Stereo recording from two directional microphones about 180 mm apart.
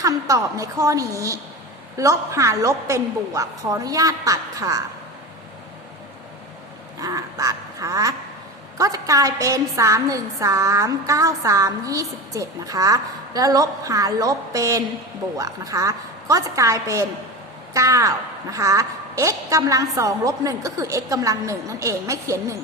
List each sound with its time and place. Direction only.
0.0 s a woman's voice: 20° right (ahead or behind)
7.0 s duck: 20° right (ahead or behind)
8.8 s a woman's voice: 20° right (ahead or behind)